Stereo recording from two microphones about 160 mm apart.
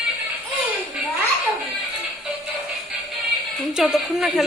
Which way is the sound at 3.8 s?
5° right (ahead or behind).